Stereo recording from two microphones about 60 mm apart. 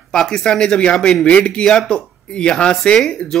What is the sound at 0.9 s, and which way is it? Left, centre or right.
Speech, centre.